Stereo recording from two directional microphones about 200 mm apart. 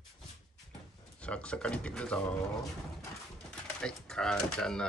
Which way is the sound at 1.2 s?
5° left (ahead or behind).